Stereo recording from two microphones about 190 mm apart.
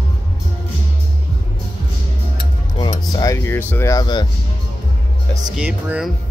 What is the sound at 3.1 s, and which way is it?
Music, 20° left (ahead or behind).